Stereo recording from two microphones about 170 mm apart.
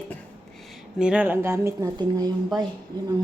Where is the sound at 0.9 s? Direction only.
5° right (ahead or behind); by 2.3 s 20° right (ahead or behind).